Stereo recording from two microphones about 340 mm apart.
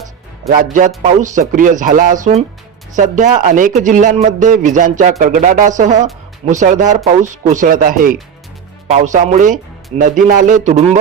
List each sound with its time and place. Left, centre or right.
0.4 s speech: right